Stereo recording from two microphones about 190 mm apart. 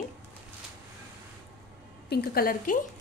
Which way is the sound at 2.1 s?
55° left (ahead or behind).